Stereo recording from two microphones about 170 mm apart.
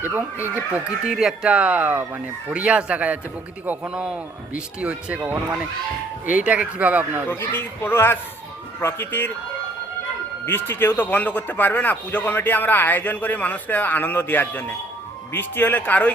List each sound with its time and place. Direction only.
0.0 s speech: 10° right (ahead or behind)
7.3 s speech: 15° left (ahead or behind)
10.4 s speech: 15° left (ahead or behind)